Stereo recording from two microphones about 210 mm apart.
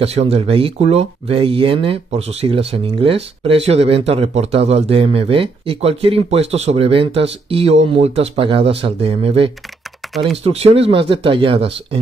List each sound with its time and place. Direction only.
0.0 s speech: 30° right (ahead or behind)